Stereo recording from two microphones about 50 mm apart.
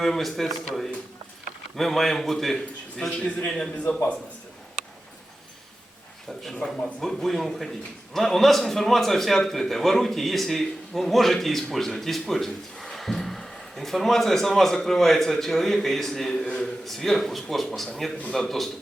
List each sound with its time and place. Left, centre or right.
0.0 s a man's voice: centre
1.7 s a man's voice: centre
3.2 s a man's voice: left
6.4 s a man's voice: centre